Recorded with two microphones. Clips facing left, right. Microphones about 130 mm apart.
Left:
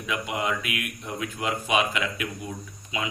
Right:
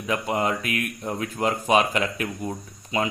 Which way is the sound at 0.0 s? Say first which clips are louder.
Right 4 dB; 40° right (ahead or behind).